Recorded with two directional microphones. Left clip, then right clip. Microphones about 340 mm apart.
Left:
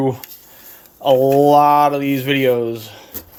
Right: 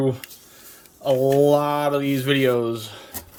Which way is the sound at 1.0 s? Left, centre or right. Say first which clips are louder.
Left 5 dB; centre.